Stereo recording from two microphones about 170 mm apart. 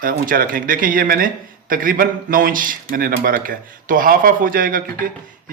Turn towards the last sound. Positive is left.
turn(degrees=-55)  # may be behind; listen again after turning